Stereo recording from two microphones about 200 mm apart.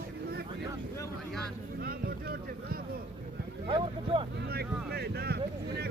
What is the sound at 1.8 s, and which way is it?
Speech, 50° right (ahead or behind).